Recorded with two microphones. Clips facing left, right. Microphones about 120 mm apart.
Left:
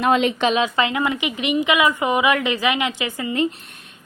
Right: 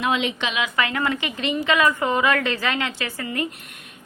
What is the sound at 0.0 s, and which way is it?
Speech, 45° left (ahead or behind).